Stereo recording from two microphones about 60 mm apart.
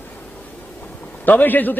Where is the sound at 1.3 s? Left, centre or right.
Left.